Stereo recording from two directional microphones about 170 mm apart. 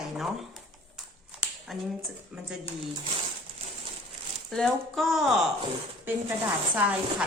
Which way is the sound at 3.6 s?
35° right (ahead or behind).